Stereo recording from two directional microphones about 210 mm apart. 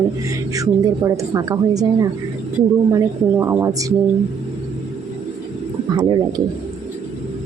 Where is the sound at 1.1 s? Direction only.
15° right (ahead or behind).